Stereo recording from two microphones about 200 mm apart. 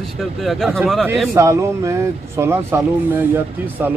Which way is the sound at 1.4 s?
15° right (ahead or behind).